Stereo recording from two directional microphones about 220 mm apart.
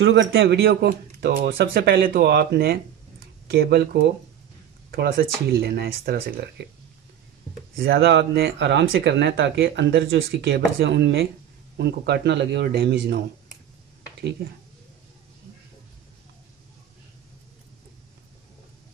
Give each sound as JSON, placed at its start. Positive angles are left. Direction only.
{"t": 0.0, "sound": "speech", "side_deg": -55}
{"t": 7.8, "sound": "speech", "side_deg": -45}
{"t": 14.4, "sound": "speech", "side_deg": -45}